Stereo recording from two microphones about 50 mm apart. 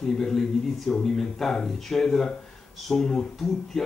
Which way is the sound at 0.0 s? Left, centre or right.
Centre.